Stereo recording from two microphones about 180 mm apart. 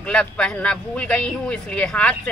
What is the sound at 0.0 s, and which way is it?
Speech, 5° left (ahead or behind).